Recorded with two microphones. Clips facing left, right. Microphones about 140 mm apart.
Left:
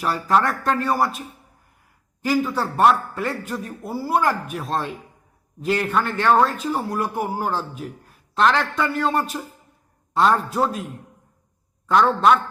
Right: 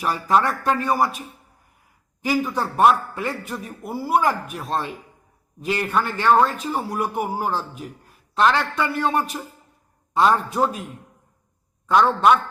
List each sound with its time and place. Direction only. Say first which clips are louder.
0.0 s a man's voice: even; 10° right (ahead or behind)
2.2 s a man's voice: left 1 dB; 10° right (ahead or behind)
3.8 s a man's voice: right 1 dB; 20° right (ahead or behind)
7.5 s a man's voice: left 1 dB; centre (ahead or behind)
11.9 s a man's voice: even; 5° right (ahead or behind)